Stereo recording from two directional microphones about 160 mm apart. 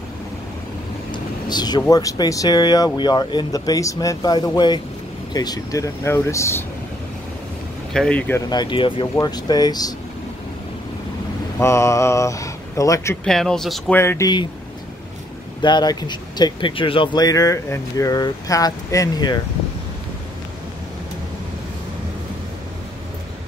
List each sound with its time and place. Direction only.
1.1 s vehicle: 25° left (ahead or behind)
1.8 s speech: 20° left (ahead or behind)
7.9 s speech: 5° left (ahead or behind)
8.4 s speech: 25° left (ahead or behind)
11.6 s speech: 20° left (ahead or behind)
13.2 s speech: 5° left (ahead or behind)
13.9 s speech: 15° left (ahead or behind)
15.6 s speech: 25° left (ahead or behind)